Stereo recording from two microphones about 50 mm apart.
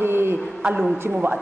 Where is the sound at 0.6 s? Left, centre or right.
Centre.